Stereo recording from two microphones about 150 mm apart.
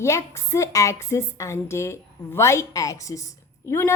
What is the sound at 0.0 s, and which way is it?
A woman's voice, 20° left (ahead or behind).